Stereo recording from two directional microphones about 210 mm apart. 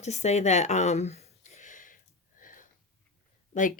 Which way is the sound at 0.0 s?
30° left (ahead or behind).